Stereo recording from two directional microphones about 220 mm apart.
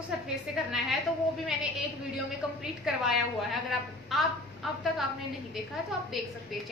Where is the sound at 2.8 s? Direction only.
Centre (ahead or behind).